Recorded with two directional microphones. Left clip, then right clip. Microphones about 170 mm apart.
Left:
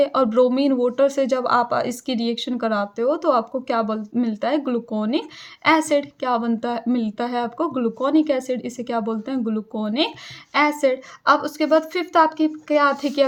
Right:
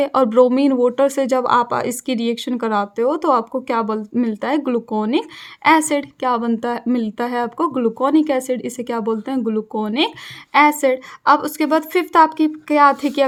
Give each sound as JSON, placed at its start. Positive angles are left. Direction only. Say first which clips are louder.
{"t": 0.0, "sound": "speech", "louder": "right 3 dB", "side_deg": -40}